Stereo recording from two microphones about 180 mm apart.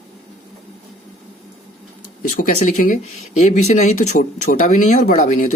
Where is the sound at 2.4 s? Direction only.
45° left (ahead or behind).